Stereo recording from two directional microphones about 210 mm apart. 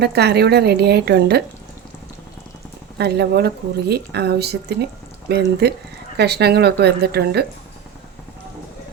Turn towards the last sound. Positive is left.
turn(degrees=-50)  # may be behind; listen again after turning